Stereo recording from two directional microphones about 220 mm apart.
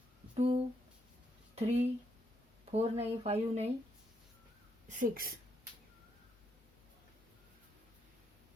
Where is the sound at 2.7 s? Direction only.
30° right (ahead or behind).